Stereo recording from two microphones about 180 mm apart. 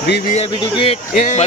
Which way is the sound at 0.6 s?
30° left (ahead or behind).